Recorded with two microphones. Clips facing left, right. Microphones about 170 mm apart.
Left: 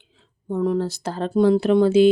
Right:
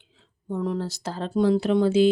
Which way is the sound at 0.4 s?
55° left (ahead or behind).